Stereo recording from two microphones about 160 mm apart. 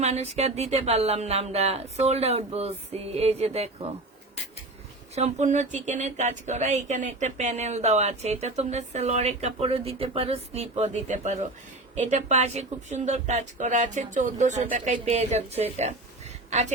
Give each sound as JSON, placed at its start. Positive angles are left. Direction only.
{"t": 0.0, "sound": "speech", "side_deg": -40}
{"t": 5.1, "sound": "speech", "side_deg": -45}
{"t": 15.8, "sound": "a sound", "side_deg": -45}